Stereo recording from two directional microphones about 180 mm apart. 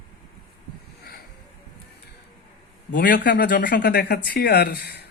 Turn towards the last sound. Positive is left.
turn(degrees=65)  # may be behind; listen again after turning